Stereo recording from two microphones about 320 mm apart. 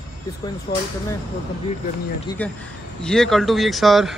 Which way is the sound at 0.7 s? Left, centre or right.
Centre.